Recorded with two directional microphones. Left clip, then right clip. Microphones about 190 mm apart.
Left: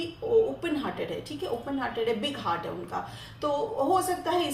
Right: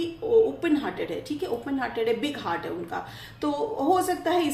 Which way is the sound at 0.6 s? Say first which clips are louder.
Right 4 dB; 40° right (ahead or behind).